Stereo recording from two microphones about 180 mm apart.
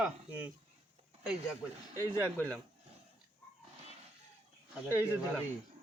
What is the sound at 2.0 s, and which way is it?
Speech, 10° left (ahead or behind).